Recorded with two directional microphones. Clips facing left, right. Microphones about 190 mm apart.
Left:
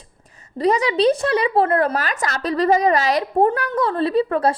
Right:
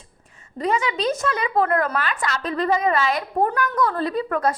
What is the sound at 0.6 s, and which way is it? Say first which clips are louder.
A woman's voice: left 6 dB; 35° left (ahead or behind).